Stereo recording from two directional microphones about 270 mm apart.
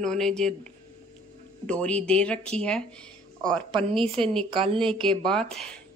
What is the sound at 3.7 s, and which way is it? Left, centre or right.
A woman's voice, centre.